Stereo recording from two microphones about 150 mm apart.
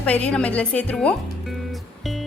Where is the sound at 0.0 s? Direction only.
10° left (ahead or behind).